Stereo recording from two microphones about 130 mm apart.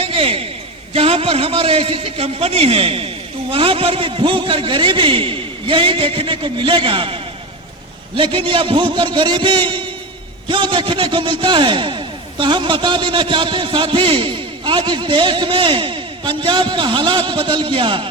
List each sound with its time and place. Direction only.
0.0 s a man's voice: 45° right (ahead or behind)